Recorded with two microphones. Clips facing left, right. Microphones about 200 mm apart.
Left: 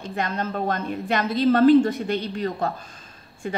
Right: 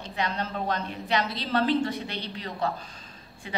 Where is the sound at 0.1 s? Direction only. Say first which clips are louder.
Left 3 dB; 50° left (ahead or behind).